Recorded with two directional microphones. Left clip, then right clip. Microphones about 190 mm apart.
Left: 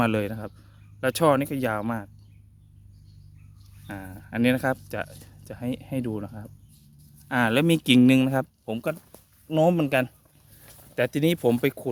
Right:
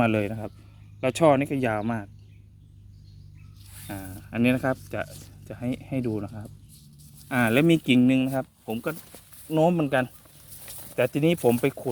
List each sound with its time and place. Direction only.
0.0 s speech: 20° left (ahead or behind)
3.8 s speech: 20° left (ahead or behind)
8.0 s speech: 50° left (ahead or behind)
9.5 s speech: 30° left (ahead or behind)
10.7 s a sound: 55° right (ahead or behind)
10.9 s speech: 25° left (ahead or behind)